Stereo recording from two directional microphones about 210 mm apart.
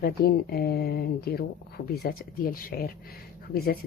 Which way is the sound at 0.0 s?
45° left (ahead or behind).